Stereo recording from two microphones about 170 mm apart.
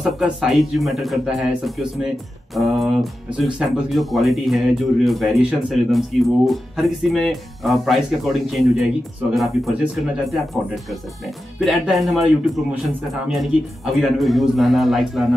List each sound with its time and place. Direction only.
0.0 s speech: centre (ahead or behind)